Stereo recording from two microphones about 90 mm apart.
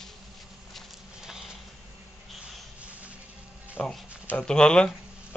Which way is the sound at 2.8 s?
15° right (ahead or behind).